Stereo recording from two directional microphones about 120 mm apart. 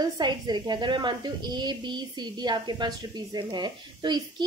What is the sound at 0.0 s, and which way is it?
A woman's voice, 40° right (ahead or behind).